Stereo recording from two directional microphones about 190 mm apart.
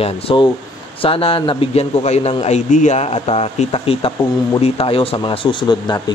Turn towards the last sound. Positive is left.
turn(degrees=20)  # may be behind; listen again after turning